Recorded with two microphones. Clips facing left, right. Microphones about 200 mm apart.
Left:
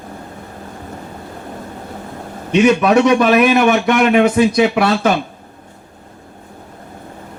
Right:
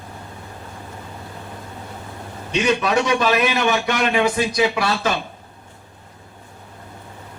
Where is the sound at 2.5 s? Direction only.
60° left (ahead or behind).